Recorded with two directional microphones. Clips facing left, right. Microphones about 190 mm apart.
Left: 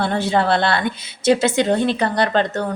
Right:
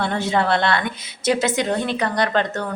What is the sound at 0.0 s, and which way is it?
A woman's voice, 30° left (ahead or behind).